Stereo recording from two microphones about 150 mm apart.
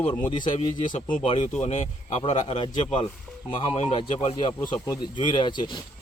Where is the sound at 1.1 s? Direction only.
35° left (ahead or behind).